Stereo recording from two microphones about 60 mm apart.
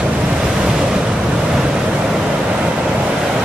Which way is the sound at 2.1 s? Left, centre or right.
Centre.